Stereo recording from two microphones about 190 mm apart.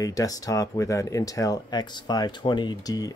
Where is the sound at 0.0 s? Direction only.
20° left (ahead or behind).